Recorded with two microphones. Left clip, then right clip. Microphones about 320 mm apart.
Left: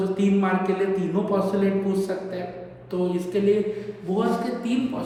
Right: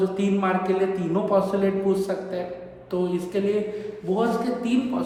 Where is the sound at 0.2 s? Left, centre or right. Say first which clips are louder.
Even; centre.